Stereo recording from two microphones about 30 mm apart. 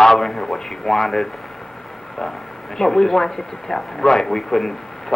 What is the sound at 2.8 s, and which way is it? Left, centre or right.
A man's voice, centre.